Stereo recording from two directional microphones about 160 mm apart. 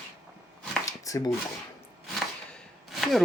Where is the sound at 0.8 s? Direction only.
20° left (ahead or behind).